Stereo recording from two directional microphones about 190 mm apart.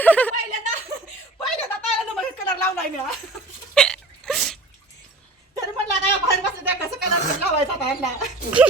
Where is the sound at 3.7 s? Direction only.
5° left (ahead or behind).